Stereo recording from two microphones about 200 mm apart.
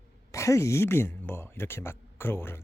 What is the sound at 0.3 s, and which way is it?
Speech, 15° left (ahead or behind).